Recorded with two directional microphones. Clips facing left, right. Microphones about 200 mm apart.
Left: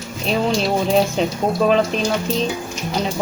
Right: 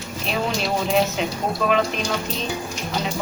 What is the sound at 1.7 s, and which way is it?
Speech, 35° left (ahead or behind).